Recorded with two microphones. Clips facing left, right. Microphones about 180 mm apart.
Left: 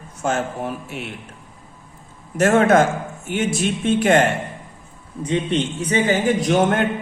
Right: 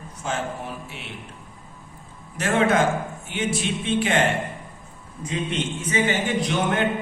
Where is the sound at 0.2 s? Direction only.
50° left (ahead or behind).